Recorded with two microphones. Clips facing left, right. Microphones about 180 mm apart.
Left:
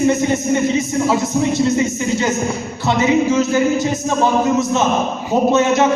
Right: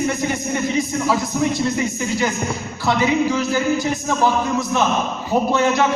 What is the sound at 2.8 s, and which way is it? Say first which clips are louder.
A man's voice: left 3 dB; 25° left (ahead or behind).